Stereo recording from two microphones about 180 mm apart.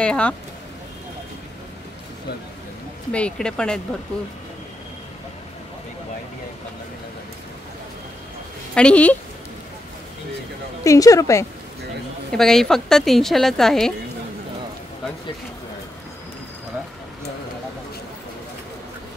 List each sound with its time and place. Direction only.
0.0 s a woman's voice: 5° left (ahead or behind)
3.1 s a woman's voice: 5° left (ahead or behind)
8.7 s a woman's voice: 5° left (ahead or behind)
10.8 s a woman's voice: 20° left (ahead or behind)
12.3 s a woman's voice: centre (ahead or behind)